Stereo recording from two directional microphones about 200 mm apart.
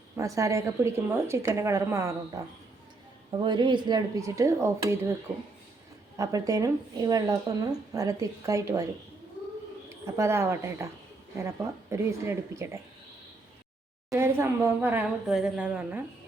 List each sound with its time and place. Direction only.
0.2 s speech: 15° right (ahead or behind)
6.1 s speech: 15° right (ahead or behind)
9.9 s speech: 15° right (ahead or behind)
14.1 s speech: 15° right (ahead or behind)